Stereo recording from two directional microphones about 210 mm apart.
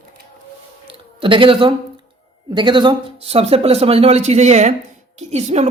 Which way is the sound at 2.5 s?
20° right (ahead or behind).